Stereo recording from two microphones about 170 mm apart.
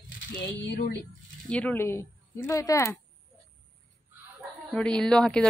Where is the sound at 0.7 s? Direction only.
85° left.